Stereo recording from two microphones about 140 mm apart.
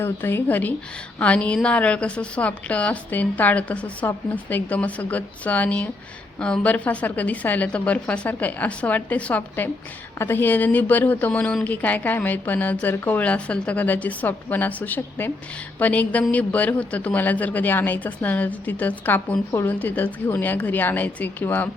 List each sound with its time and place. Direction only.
0.0 s a woman's voice: 15° left (ahead or behind)